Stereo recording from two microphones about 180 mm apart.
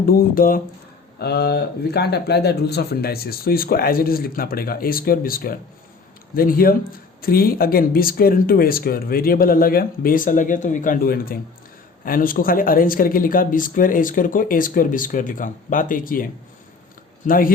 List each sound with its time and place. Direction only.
0.0 s speech: 55° left (ahead or behind)
1.2 s speech: 65° left (ahead or behind); by 16.2 s 50° left (ahead or behind)
17.2 s speech: 50° left (ahead or behind)